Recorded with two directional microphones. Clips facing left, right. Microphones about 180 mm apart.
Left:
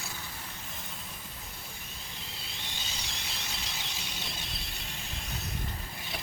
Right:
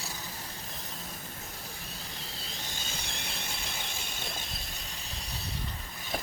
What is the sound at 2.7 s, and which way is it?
Squeal, 50° right (ahead or behind).